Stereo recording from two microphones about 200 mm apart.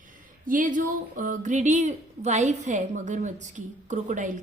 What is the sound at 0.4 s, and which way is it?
A woman's voice, 40° right (ahead or behind).